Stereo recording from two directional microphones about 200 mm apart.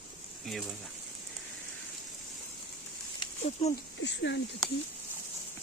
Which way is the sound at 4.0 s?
60° left (ahead or behind).